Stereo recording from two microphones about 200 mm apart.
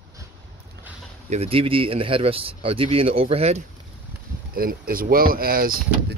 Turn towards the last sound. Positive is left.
turn(degrees=-45)  # may be behind; listen again after turning